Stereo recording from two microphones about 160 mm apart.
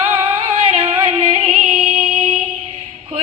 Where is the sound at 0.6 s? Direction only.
40° right (ahead or behind).